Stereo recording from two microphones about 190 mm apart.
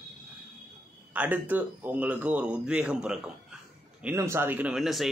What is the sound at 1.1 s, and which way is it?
A man's voice, 10° right (ahead or behind).